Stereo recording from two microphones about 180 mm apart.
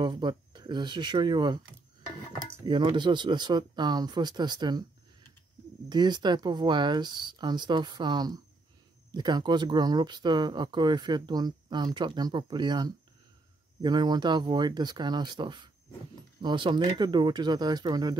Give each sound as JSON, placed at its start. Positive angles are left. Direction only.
{"t": 0.0, "sound": "speech", "side_deg": -25}
{"t": 2.6, "sound": "speech", "side_deg": -25}
{"t": 5.9, "sound": "speech", "side_deg": -25}